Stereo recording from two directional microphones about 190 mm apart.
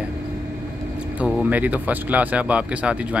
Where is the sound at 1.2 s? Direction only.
5° right (ahead or behind).